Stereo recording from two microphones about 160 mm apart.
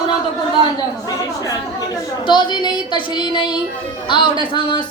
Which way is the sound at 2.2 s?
30° left (ahead or behind).